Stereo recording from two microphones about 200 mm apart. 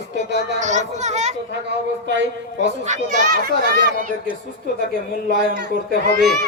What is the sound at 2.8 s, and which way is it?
Speech, 35° right (ahead or behind).